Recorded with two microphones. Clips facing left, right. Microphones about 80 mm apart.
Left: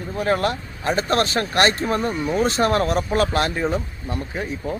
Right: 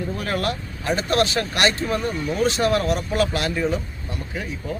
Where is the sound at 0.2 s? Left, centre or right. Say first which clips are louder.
Left 8 dB; left.